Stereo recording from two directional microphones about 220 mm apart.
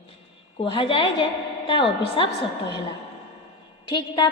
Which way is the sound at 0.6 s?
25° left (ahead or behind).